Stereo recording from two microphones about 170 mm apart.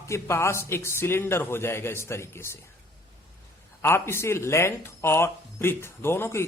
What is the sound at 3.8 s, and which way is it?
Speech, 15° left (ahead or behind).